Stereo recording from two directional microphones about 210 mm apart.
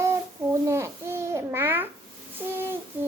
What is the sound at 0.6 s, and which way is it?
Babbling, 15° right (ahead or behind).